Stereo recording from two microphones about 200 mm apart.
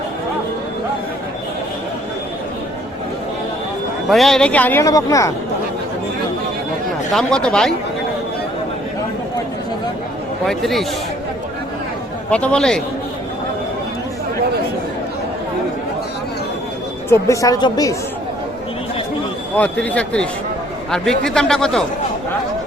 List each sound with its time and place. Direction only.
4.1 s speech: centre (ahead or behind); by 5.3 s 15° left (ahead or behind)
7.1 s a man's voice: 5° left (ahead or behind)
10.4 s a man's voice: centre (ahead or behind)
12.3 s a man's voice: 5° left (ahead or behind)
17.1 s speech: 15° left (ahead or behind)
19.5 s a man's voice: 5° left (ahead or behind)